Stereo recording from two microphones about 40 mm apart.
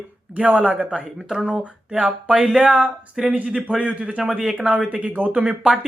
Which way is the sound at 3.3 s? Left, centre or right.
Right.